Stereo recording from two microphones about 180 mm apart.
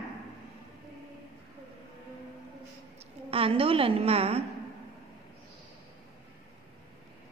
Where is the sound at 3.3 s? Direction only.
30° right (ahead or behind).